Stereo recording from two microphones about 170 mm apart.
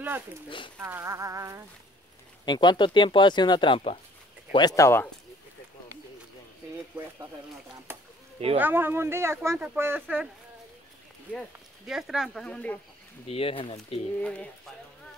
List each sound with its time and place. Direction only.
0.7 s speech: 15° right (ahead or behind)
2.4 s speech: 25° left (ahead or behind)
8.5 s speech: 10° right (ahead or behind)
11.3 s speech: 5° right (ahead or behind)
13.3 s speech: 35° left (ahead or behind)
14.2 s speech: 5° left (ahead or behind)